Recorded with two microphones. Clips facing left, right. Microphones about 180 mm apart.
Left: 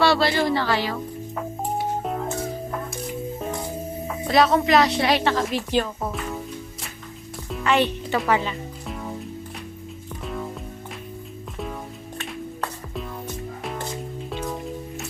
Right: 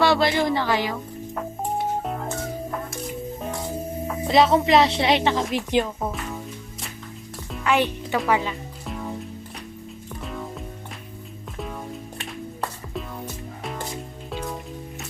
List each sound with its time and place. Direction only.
0.0 s a woman's voice: 15° right (ahead or behind)
4.3 s a woman's voice: 25° right (ahead or behind)
7.5 s music: 5° right (ahead or behind)
11.5 s music: centre (ahead or behind)
13.6 s music: centre (ahead or behind)